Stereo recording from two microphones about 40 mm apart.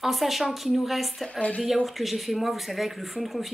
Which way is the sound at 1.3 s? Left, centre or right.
Left.